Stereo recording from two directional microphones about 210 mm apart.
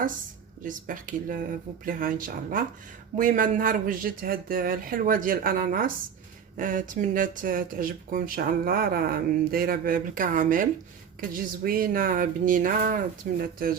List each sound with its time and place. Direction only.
0.6 s speech: 40° right (ahead or behind)